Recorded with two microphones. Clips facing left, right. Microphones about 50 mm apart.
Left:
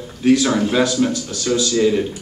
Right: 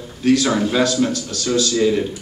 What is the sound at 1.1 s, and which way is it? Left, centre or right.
Speech, left.